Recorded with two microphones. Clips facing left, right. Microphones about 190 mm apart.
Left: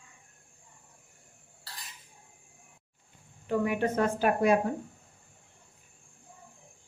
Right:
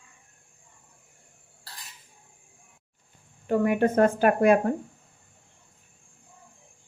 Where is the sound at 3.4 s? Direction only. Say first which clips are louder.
Right 5 dB; 50° right (ahead or behind).